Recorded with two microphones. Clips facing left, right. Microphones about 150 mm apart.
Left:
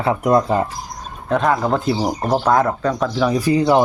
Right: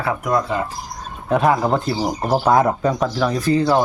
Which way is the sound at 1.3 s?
5° right (ahead or behind).